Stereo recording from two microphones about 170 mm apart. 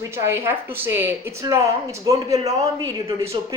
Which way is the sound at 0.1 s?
15° right (ahead or behind).